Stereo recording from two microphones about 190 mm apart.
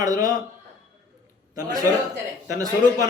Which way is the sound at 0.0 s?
20° right (ahead or behind).